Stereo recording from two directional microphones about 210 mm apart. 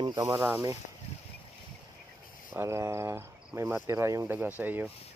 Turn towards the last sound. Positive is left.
turn(degrees=-10)  # may be behind; listen again after turning